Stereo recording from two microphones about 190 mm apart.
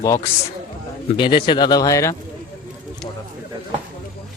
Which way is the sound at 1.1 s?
25° left (ahead or behind).